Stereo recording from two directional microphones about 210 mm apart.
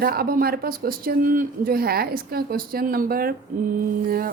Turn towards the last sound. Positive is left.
turn(degrees=-45)  # may be behind; listen again after turning